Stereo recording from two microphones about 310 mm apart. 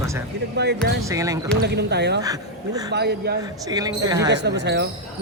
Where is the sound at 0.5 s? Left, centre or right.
Right.